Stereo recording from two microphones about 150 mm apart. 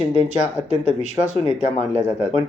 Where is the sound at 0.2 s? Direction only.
50° left (ahead or behind).